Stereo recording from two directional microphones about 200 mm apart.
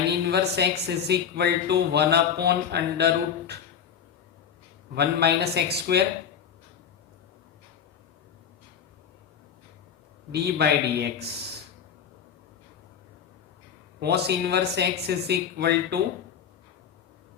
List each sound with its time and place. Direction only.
0.3 s speech: 55° right (ahead or behind)
4.9 s speech: 55° right (ahead or behind)
10.3 s speech: 55° right (ahead or behind)
14.0 s speech: 55° right (ahead or behind)